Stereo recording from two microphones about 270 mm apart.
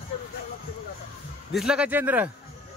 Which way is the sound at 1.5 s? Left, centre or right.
Centre.